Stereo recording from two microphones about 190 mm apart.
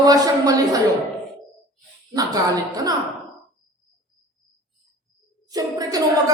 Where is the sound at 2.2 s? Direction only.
20° right (ahead or behind).